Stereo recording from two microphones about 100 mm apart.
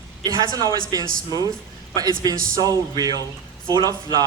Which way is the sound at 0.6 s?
40° left (ahead or behind).